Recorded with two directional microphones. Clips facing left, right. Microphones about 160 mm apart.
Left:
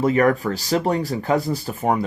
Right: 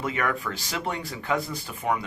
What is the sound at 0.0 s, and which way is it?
Speech, 40° left (ahead or behind).